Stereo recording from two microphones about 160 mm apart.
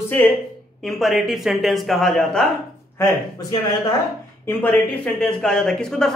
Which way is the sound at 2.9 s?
20° left (ahead or behind).